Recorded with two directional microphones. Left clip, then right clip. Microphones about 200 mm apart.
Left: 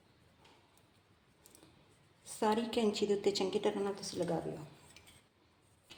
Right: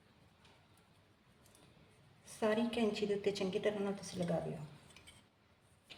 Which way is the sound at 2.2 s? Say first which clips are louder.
Left 2 dB; 35° left (ahead or behind).